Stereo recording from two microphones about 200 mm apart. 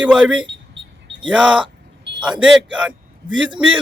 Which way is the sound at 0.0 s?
5° right (ahead or behind).